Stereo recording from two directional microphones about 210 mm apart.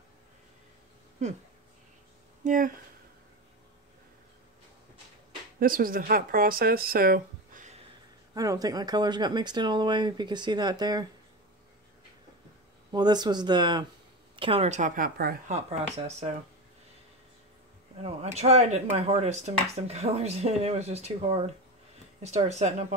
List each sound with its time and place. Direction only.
2.4 s speech: 40° right (ahead or behind)
5.6 s speech: 40° right (ahead or behind)
8.4 s speech: 15° right (ahead or behind)
12.9 s a woman's voice: 20° right (ahead or behind); by 15.5 s 45° right (ahead or behind)
15.5 s a woman's voice: 30° right (ahead or behind)
18.0 s a woman's voice: 30° right (ahead or behind)